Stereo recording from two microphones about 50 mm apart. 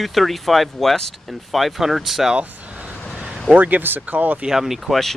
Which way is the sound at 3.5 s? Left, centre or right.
Right.